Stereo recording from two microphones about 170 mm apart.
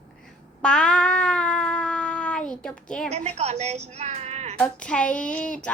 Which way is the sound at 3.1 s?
40° right (ahead or behind).